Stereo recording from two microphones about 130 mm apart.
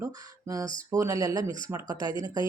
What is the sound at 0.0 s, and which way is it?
Speech, 25° right (ahead or behind).